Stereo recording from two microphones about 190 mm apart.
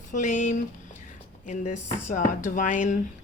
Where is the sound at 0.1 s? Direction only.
40° left (ahead or behind).